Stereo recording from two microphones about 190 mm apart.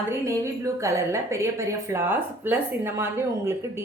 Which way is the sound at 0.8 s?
15° right (ahead or behind).